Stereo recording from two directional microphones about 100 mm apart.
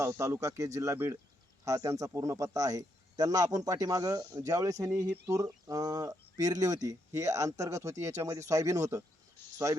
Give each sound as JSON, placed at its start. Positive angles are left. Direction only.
{"t": 0.0, "sound": "speech", "side_deg": -30}